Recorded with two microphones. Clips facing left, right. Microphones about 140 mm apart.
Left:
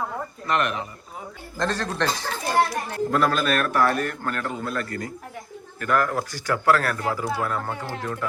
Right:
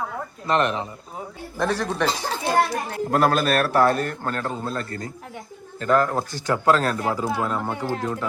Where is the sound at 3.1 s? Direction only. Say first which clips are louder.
Right 3 dB; 45° right (ahead or behind).